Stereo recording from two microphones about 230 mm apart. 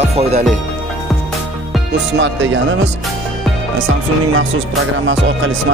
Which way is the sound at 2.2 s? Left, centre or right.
Right.